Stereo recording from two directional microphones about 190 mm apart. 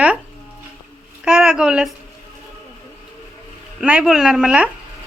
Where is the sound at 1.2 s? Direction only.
5° right (ahead or behind).